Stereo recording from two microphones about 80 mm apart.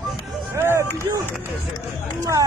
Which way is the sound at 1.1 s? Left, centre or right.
Right.